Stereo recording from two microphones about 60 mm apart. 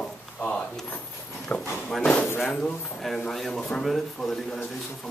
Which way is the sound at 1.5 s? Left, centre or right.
Left.